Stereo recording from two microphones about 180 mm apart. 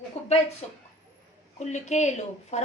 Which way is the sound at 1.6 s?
40° left (ahead or behind).